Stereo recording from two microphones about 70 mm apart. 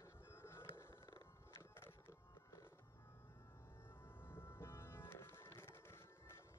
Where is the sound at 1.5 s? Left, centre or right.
Left.